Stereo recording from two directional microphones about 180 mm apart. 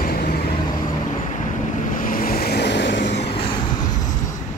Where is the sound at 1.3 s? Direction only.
45° left (ahead or behind); by 3.0 s 75° left (ahead or behind).